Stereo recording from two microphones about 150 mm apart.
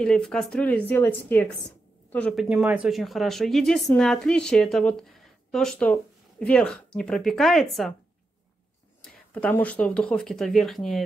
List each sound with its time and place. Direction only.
0.0 s speech: 5° left (ahead or behind)
2.4 s a woman's voice: 5° right (ahead or behind)
9.0 s a woman's voice: 10° left (ahead or behind)